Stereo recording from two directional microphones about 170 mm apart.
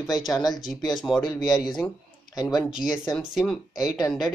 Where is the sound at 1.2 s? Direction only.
25° left (ahead or behind).